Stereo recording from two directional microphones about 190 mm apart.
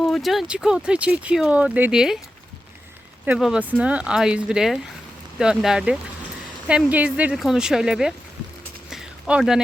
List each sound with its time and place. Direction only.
0.1 s speech: centre (ahead or behind)
3.2 s speech: 5° right (ahead or behind)
8.9 s a sound: 5° right (ahead or behind)